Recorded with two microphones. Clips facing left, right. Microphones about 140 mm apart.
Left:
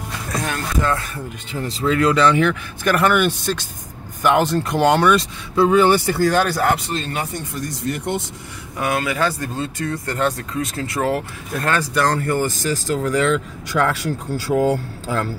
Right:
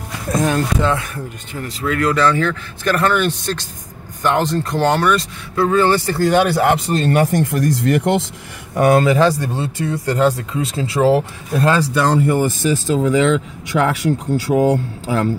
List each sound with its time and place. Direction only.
0.4 s speech: 25° right (ahead or behind)
1.6 s speech: 20° left (ahead or behind)
6.3 s speech: 15° right (ahead or behind)
6.9 s speech: 55° right (ahead or behind)
7.3 s speech: 85° right
8.7 s speech: 40° right (ahead or behind)
9.0 s speech: 30° right (ahead or behind)
12.1 s speech: 5° right (ahead or behind)
12.7 s speech: 20° right (ahead or behind)